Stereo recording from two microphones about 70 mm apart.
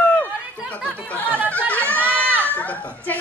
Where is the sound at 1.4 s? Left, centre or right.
Left.